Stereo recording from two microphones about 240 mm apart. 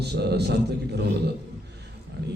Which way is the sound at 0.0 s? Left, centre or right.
Right.